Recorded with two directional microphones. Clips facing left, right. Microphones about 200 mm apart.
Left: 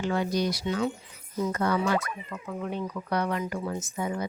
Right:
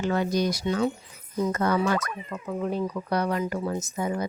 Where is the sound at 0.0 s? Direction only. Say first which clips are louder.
Right 2 dB; 45° right (ahead or behind).